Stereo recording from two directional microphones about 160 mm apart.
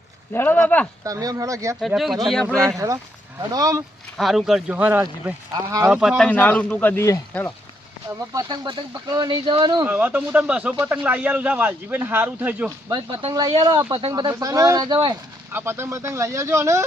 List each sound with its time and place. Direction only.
0.3 s speech: 10° left (ahead or behind)
1.0 s speech: 20° right (ahead or behind)
1.8 s speech: centre (ahead or behind)
2.6 s speech: 20° right (ahead or behind)
4.2 s speech: centre (ahead or behind)
5.5 s speech: 20° right (ahead or behind)
6.0 s speech: centre (ahead or behind); by 7.5 s 15° left (ahead or behind)
8.3 s speech: 25° right (ahead or behind)
9.8 s a man's voice: 10° right (ahead or behind)
13.2 s speech: 30° right (ahead or behind)
15.5 s a man's voice: 15° right (ahead or behind)